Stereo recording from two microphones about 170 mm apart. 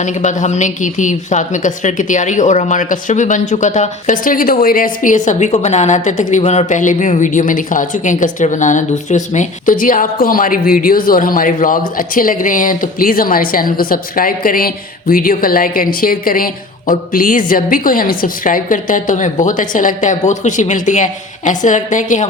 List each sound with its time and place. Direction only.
0.0 s a woman's voice: 45° left (ahead or behind)